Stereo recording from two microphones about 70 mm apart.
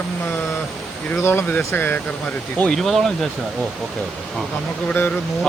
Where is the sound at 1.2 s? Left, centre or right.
Left.